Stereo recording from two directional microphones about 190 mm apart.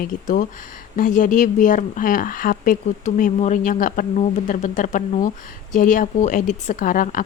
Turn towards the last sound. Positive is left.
turn(degrees=45)  # may be behind; listen again after turning